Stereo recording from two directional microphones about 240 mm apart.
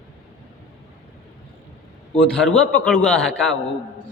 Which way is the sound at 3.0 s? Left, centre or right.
Centre.